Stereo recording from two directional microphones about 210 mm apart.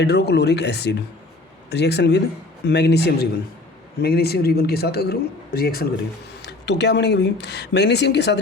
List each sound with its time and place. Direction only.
0.0 s speech: 50° left (ahead or behind)